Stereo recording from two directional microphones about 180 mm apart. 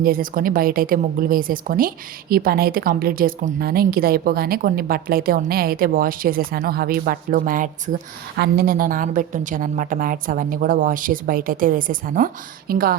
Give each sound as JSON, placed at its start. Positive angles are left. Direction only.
{"t": 0.0, "sound": "a woman's voice", "side_deg": -55}